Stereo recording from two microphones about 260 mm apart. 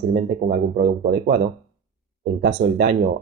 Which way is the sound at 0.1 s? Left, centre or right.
Right.